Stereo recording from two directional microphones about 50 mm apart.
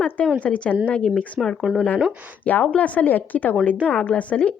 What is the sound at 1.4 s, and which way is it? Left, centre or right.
Speech, centre.